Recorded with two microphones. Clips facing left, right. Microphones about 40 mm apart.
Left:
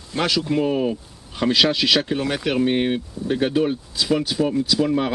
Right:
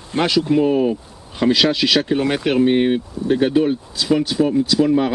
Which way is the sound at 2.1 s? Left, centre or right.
Centre.